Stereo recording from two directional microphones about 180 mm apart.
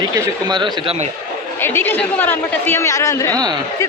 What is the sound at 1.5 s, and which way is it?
Speech, 10° left (ahead or behind).